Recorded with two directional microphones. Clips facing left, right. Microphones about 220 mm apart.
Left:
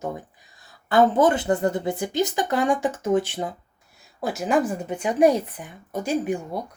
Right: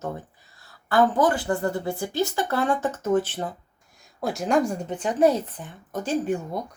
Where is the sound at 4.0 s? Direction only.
Centre (ahead or behind).